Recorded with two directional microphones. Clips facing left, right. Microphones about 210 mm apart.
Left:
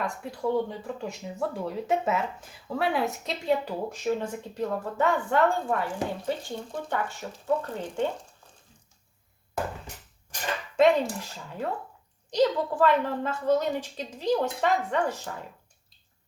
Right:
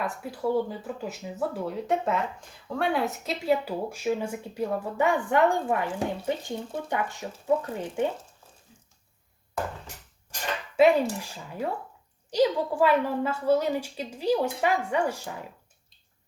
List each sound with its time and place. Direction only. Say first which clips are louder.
0.0 s speech: even; 5° right (ahead or behind)
10.8 s speech: right 1 dB; 10° right (ahead or behind)